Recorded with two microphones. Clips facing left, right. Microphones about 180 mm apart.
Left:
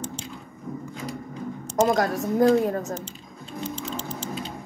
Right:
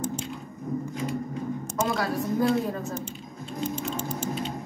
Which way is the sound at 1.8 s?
40° left (ahead or behind).